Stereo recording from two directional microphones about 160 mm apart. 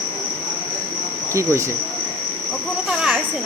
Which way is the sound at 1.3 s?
15° right (ahead or behind).